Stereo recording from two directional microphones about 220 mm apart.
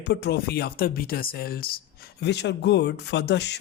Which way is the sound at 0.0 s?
50° left (ahead or behind).